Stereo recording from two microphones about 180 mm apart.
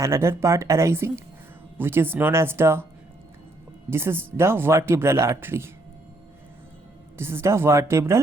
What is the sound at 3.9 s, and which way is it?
Speech, 15° right (ahead or behind).